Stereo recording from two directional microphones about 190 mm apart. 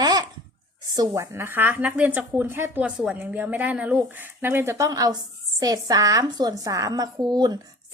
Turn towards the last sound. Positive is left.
turn(degrees=-20)  # may be behind; listen again after turning